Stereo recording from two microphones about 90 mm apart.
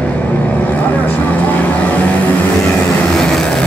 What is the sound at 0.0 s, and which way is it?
Vehicle, 15° left (ahead or behind).